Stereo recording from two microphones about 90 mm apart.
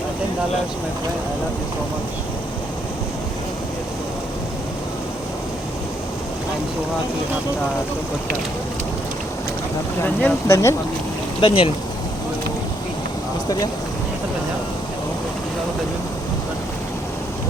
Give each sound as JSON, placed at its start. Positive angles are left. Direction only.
{"t": 10.0, "sound": "speech", "side_deg": 25}
{"t": 11.3, "sound": "speech", "side_deg": 75}